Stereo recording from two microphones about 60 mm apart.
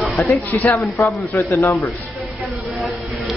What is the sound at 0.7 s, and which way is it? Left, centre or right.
Speech, left.